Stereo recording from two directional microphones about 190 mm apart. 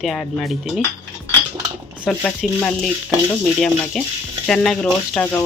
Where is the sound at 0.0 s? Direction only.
Centre (ahead or behind).